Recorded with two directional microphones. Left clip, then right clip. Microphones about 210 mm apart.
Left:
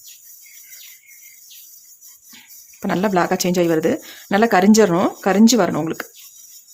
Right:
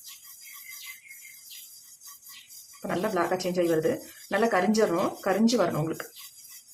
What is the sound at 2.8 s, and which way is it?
Speech, 50° left (ahead or behind).